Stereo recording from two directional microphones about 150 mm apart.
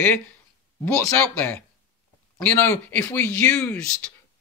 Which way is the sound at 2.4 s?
15° left (ahead or behind).